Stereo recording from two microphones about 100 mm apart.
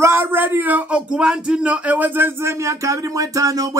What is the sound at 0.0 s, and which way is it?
Speech, 25° right (ahead or behind).